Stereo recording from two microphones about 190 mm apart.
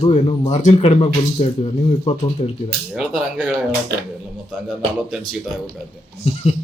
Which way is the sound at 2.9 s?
5° right (ahead or behind).